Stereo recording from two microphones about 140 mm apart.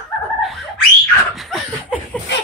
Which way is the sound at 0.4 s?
Centre (ahead or behind).